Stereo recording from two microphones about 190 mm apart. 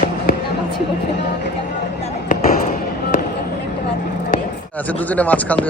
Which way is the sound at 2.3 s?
45° left (ahead or behind).